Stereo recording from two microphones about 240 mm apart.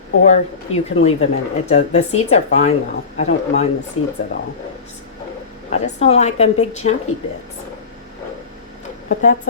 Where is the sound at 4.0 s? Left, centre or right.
Left.